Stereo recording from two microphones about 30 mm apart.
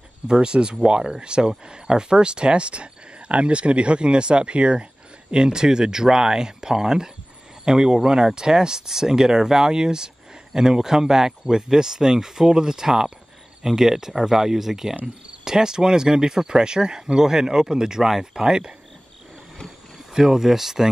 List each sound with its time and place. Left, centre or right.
0.3 s speech: right
20.2 s speech: centre